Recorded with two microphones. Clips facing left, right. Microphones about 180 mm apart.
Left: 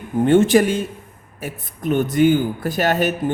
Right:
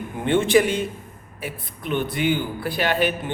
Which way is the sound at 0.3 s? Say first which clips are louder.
Left 4 dB; 45° left (ahead or behind).